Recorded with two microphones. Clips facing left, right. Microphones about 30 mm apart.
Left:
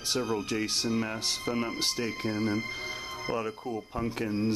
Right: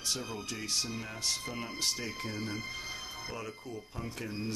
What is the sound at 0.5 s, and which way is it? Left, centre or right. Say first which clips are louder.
Speech: left 6 dB; left.